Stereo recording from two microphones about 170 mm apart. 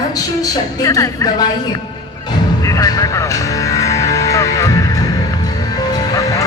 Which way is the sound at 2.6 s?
20° left (ahead or behind).